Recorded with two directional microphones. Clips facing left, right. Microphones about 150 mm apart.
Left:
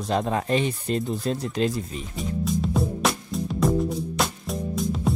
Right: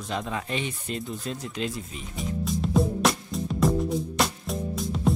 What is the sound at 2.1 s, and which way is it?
Music, centre (ahead or behind).